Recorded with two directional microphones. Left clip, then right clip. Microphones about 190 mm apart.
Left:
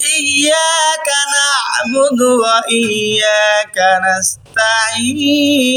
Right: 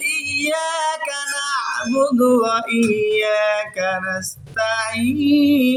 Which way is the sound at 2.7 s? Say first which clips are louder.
Left 4 dB; 15° right (ahead or behind).